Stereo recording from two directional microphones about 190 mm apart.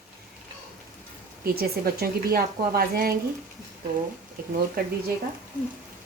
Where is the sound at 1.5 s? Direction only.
55° right (ahead or behind).